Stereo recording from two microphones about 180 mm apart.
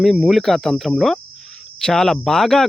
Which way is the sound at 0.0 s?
Centre (ahead or behind).